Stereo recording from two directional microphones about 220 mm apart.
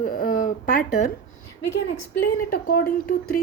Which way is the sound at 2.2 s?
40° left (ahead or behind).